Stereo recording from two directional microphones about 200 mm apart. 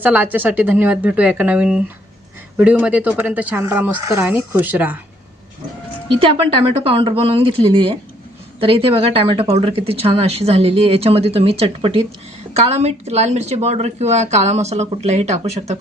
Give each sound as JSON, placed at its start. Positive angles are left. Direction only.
{"t": 0.0, "sound": "a woman's voice", "side_deg": -10}
{"t": 6.1, "sound": "a woman's voice", "side_deg": -30}